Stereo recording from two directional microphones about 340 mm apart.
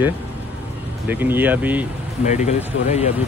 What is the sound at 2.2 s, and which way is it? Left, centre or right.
Speech, centre.